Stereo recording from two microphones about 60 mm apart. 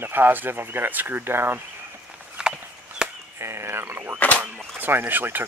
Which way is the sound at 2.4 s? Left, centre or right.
Centre.